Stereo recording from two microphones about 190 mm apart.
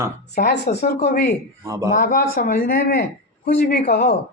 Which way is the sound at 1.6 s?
15° right (ahead or behind).